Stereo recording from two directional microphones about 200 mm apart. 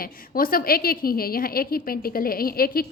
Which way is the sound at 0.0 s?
45° left (ahead or behind).